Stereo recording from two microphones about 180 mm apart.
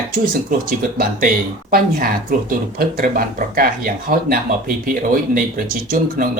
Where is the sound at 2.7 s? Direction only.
55° right (ahead or behind).